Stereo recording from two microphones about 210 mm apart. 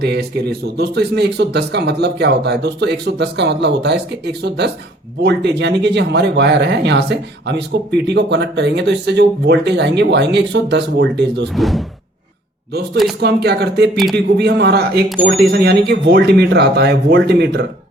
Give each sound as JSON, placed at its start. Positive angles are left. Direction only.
{"t": 0.0, "sound": "speech", "side_deg": -50}
{"t": 11.5, "sound": "speech", "side_deg": 0}
{"t": 13.1, "sound": "speech", "side_deg": -50}
{"t": 13.9, "sound": "speech", "side_deg": 0}
{"t": 14.3, "sound": "speech", "side_deg": -50}